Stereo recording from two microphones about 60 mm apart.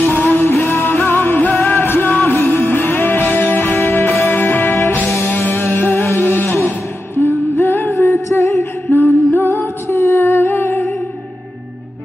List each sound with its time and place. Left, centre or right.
0.0 s music: left
6.2 s a sound: left
7.2 s singing: left
8.3 s music: left
8.9 s music: left
9.8 s humming: left